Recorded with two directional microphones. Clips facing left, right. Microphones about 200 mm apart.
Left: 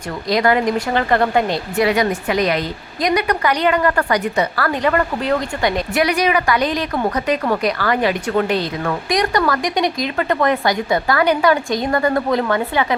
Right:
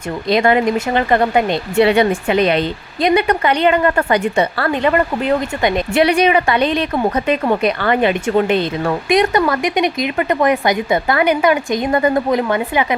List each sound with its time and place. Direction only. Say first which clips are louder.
0.3 s speech: right 2 dB; 25° right (ahead or behind)